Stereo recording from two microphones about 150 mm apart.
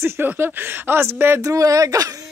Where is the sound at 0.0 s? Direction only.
15° right (ahead or behind).